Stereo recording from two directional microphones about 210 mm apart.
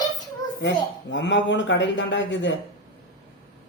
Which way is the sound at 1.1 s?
60° left (ahead or behind).